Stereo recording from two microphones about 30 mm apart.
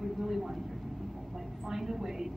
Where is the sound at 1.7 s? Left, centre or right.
Centre.